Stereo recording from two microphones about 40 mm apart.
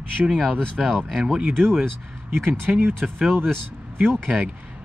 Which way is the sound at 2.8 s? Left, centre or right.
Right.